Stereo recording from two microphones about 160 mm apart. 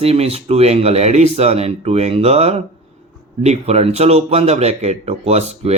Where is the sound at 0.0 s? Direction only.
40° right (ahead or behind).